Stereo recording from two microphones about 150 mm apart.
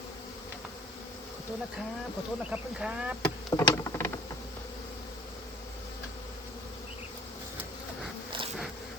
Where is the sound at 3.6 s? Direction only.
20° left (ahead or behind).